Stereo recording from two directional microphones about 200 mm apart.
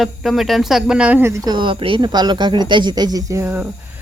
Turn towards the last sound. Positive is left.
turn(degrees=-10)  # may be behind; listen again after turning